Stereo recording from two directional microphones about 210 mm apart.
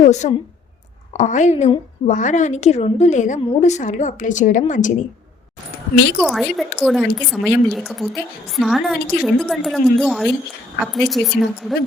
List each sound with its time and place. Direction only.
0.0 s a woman's voice: 35° left (ahead or behind)
6.1 s a woman's voice: centre (ahead or behind)